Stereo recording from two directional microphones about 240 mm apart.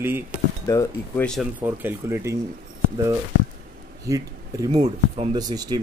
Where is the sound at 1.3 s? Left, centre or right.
Centre.